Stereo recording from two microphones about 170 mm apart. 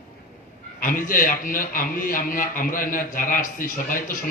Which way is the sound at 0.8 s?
50° left (ahead or behind).